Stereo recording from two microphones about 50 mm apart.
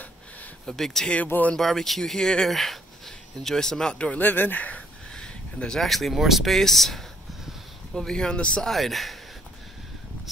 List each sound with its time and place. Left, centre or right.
0.7 s speech: centre
1.0 s speech: left
1.6 s speech: centre
3.9 s speech: left
4.2 s speech: left
5.1 s a sound: centre
5.8 s speech: centre
8.6 s speech: centre